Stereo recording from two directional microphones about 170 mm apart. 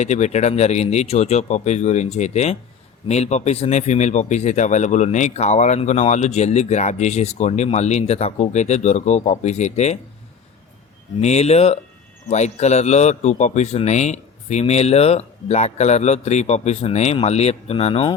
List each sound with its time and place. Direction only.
0.0 s speech: 45° left (ahead or behind)
11.2 s speech: 40° left (ahead or behind)